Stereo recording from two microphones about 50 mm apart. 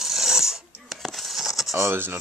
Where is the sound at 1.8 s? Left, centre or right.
Right.